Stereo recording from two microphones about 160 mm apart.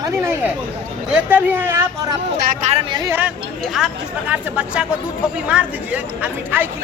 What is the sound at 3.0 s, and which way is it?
A woman's voice, 10° right (ahead or behind).